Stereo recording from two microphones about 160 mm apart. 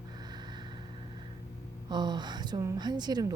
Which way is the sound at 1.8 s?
30° right (ahead or behind).